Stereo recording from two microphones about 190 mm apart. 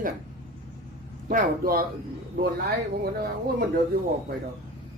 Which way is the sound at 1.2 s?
50° right (ahead or behind).